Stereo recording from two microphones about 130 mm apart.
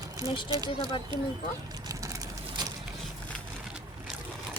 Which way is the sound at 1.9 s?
25° right (ahead or behind).